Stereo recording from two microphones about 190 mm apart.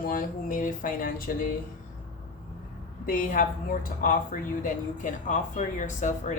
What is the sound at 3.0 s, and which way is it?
A woman's voice, 45° left (ahead or behind).